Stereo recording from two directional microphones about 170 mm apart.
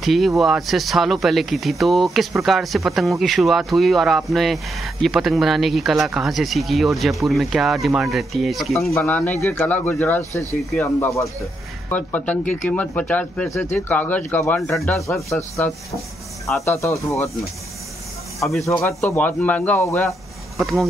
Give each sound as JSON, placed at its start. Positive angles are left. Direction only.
{"t": 0.0, "sound": "speech", "side_deg": 0}
{"t": 8.9, "sound": "speech", "side_deg": 10}
{"t": 15.2, "sound": "speech", "side_deg": 15}
{"t": 18.4, "sound": "speech", "side_deg": 0}
{"t": 18.7, "sound": "speech", "side_deg": 15}
{"t": 20.0, "sound": "a sound", "side_deg": 0}